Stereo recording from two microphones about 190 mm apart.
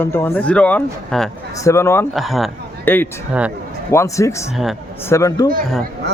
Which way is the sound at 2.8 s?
10° left (ahead or behind).